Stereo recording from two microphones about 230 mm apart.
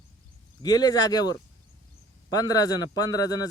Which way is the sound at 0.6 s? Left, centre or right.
Centre.